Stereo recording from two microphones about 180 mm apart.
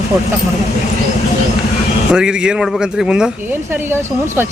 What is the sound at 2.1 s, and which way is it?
Speech, 5° right (ahead or behind).